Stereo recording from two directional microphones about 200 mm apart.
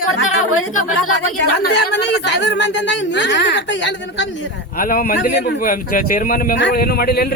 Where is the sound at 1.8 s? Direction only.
60° left (ahead or behind).